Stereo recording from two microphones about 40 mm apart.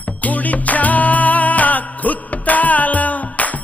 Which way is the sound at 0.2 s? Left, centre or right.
Left.